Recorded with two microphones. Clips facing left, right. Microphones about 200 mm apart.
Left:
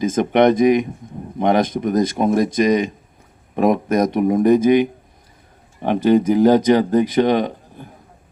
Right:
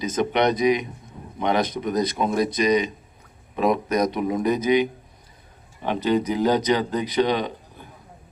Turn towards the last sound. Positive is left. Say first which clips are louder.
# left 6 dB
turn(degrees=45)  # may be behind; listen again after turning